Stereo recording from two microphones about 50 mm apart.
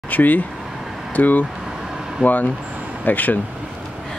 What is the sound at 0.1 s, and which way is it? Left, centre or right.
Speech, left.